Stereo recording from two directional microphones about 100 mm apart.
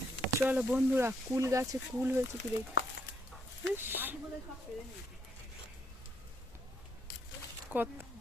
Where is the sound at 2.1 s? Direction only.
20° right (ahead or behind).